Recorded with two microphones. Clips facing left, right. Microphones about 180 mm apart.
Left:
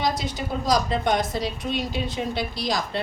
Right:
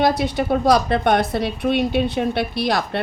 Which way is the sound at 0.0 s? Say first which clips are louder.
Right 8 dB; 60° right (ahead or behind).